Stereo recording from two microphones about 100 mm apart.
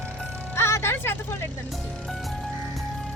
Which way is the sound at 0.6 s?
25° left (ahead or behind).